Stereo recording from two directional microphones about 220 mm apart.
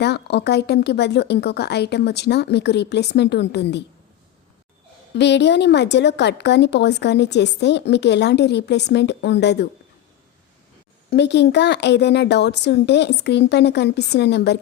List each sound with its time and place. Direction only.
0.0 s a woman's voice: 50° left (ahead or behind)
5.1 s a woman's voice: 50° left (ahead or behind)
11.1 s a woman's voice: 50° left (ahead or behind)